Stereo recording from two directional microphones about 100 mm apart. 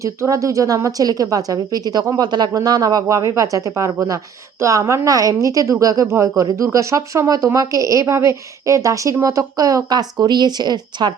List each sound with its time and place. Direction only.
0.0 s speech: 30° right (ahead or behind)
2.5 s speech: 35° right (ahead or behind)